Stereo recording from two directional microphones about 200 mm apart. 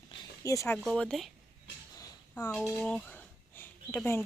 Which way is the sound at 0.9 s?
Centre (ahead or behind).